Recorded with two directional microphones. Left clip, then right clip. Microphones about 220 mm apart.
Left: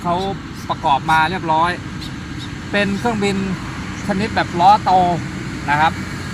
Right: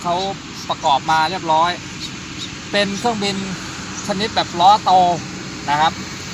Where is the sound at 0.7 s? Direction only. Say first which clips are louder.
Even; 15° right (ahead or behind).